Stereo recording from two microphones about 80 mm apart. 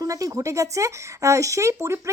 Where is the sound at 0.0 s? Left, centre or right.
Right.